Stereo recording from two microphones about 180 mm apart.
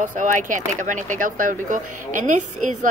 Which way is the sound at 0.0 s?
45° right (ahead or behind).